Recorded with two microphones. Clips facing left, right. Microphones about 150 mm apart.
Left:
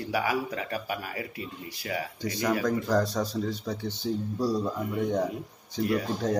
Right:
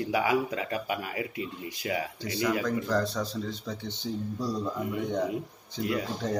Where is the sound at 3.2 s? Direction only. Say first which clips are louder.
Left 3 dB; 10° left (ahead or behind).